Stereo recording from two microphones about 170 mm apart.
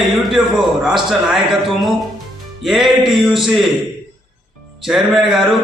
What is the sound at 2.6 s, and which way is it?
Speech, centre (ahead or behind).